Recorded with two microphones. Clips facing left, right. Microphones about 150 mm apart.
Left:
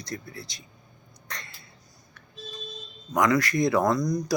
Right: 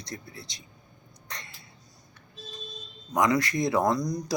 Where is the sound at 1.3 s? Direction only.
20° right (ahead or behind).